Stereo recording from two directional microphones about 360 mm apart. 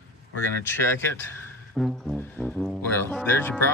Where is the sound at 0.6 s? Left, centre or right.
Centre.